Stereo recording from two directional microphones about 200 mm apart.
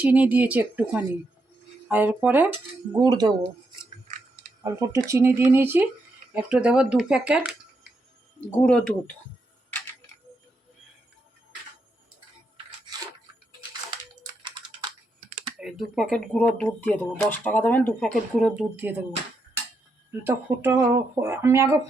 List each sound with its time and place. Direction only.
0.0 s speech: 10° right (ahead or behind)
2.9 s speech: 20° right (ahead or behind)
4.6 s speech: 15° right (ahead or behind)
8.4 s speech: 5° left (ahead or behind)
15.5 s speech: centre (ahead or behind)
20.1 s speech: 10° right (ahead or behind)